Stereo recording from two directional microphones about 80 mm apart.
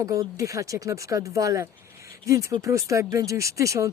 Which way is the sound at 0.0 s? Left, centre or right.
Right.